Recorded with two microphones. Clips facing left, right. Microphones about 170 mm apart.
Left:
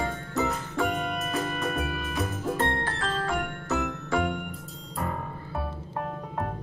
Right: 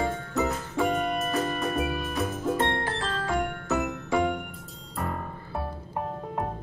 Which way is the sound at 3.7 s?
5° right (ahead or behind).